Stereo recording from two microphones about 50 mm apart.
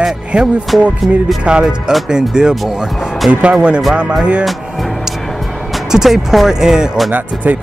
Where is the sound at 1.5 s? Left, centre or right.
Centre.